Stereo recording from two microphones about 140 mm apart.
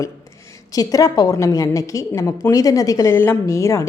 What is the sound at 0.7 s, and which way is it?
A woman's voice, 25° left (ahead or behind).